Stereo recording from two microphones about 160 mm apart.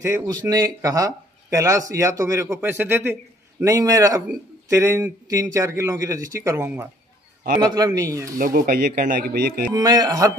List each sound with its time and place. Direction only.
0.0 s a man's voice: 15° right (ahead or behind)
7.6 s speech: 25° right (ahead or behind)
8.4 s speech: 60° right (ahead or behind)
9.8 s speech: 25° right (ahead or behind)